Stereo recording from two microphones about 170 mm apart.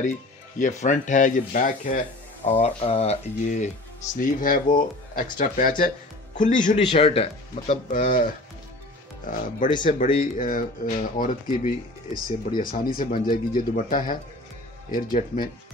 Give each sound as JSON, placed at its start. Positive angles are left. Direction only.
{"t": 0.6, "sound": "speech", "side_deg": 45}
{"t": 7.9, "sound": "speech", "side_deg": 50}
{"t": 9.8, "sound": "speech", "side_deg": 55}